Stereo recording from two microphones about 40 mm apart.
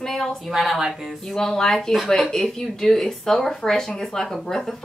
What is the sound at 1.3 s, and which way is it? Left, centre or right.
Speech, centre.